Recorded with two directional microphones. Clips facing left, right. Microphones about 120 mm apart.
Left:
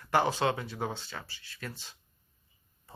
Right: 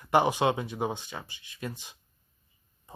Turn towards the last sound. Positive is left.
turn(degrees=-15)  # may be behind; listen again after turning